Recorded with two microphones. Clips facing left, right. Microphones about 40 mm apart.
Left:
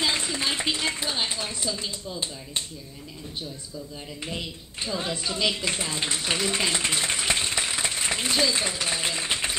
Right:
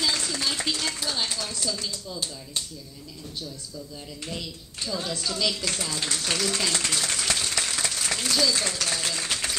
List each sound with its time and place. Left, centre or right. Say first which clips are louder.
0.0 s a woman's voice: left 1 dB; left
4.2 s speech: left 2 dB; left